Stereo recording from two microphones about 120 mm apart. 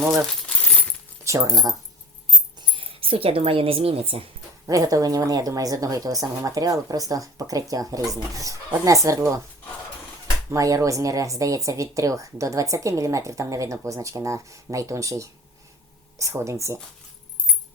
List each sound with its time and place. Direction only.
0.2 s coin: 5° left (ahead or behind)
1.2 s speech: 25° right (ahead or behind)
2.6 s speech: 45° right (ahead or behind)
4.6 s speech: 30° right (ahead or behind)
10.5 s speech: 25° right (ahead or behind)